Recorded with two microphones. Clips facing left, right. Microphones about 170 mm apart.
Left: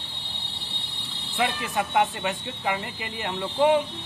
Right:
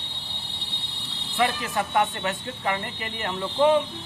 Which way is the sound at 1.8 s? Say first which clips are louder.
Left 1 dB; 15° left (ahead or behind).